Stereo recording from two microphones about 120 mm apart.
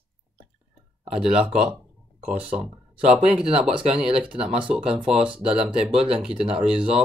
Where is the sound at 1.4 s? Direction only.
10° right (ahead or behind).